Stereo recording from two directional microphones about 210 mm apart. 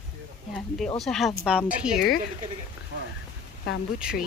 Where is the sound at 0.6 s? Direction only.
5° left (ahead or behind).